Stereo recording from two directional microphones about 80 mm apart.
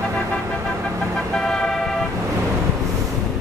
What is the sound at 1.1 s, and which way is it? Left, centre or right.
Vehicle, centre.